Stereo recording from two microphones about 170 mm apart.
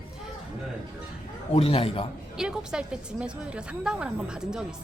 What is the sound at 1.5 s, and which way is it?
Speech, 35° left (ahead or behind).